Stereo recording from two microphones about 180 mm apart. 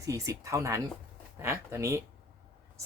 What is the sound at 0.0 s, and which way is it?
Speech, 15° right (ahead or behind).